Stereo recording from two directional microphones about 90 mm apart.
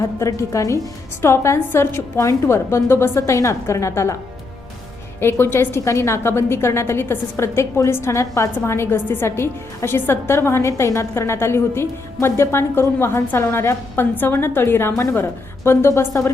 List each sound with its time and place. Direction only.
0.2 s a woman's voice: 35° left (ahead or behind)
5.2 s a woman's voice: 25° left (ahead or behind)